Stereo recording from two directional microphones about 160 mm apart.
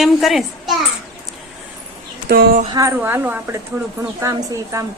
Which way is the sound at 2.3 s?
80° right.